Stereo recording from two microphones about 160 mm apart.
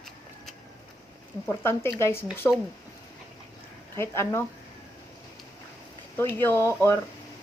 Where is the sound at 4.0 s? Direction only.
15° left (ahead or behind).